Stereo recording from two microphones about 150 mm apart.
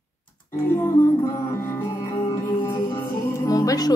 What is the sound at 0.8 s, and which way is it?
Music, 25° left (ahead or behind).